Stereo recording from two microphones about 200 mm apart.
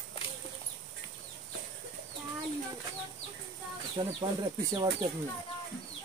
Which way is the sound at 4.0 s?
15° right (ahead or behind).